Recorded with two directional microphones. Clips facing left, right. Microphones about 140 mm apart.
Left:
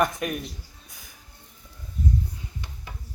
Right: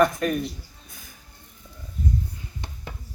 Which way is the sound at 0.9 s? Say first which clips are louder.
Right 3 dB; 15° left (ahead or behind).